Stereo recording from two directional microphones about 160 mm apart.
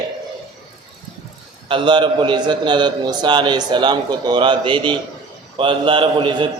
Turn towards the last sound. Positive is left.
turn(degrees=-30)  # may be behind; listen again after turning